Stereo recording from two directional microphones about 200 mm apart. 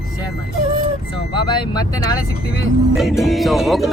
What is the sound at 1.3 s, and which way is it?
Speech, 25° left (ahead or behind).